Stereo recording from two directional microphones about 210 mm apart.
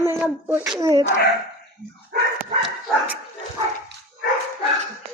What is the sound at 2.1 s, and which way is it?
Dog, 45° right (ahead or behind).